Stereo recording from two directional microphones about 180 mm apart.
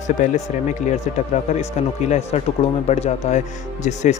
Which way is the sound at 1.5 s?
40° left (ahead or behind).